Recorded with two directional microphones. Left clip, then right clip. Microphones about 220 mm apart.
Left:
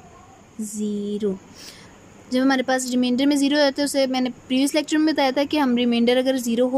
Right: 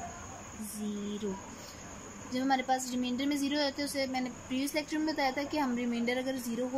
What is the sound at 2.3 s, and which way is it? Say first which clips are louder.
A woman's voice: left 10 dB; 45° left (ahead or behind).